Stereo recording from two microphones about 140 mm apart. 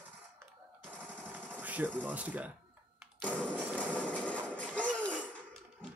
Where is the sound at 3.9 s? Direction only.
10° left (ahead or behind).